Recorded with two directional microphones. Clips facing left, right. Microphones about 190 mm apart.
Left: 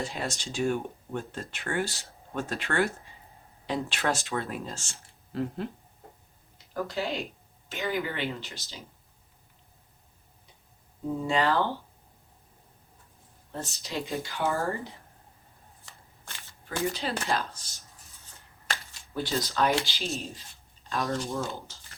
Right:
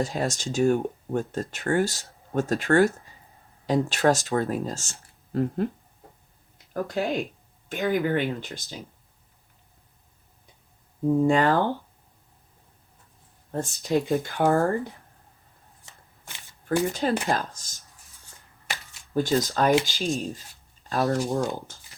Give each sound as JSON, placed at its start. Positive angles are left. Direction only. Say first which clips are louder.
{"t": 0.0, "sound": "speech", "louder": "right 7 dB", "side_deg": -40}
{"t": 6.8, "sound": "speech", "louder": "right 6 dB", "side_deg": -50}
{"t": 11.2, "sound": "speech", "louder": "right 5 dB", "side_deg": -50}
{"t": 13.5, "sound": "speech", "louder": "right 11 dB", "side_deg": -50}
{"t": 15.9, "sound": "shuffling cards", "louder": "right 1 dB", "side_deg": -15}
{"t": 16.6, "sound": "speech", "louder": "right 7 dB", "side_deg": -50}
{"t": 19.1, "sound": "speech", "louder": "right 7 dB", "side_deg": -45}